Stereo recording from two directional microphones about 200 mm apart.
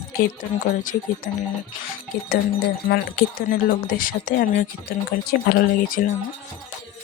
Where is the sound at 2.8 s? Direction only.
50° left (ahead or behind).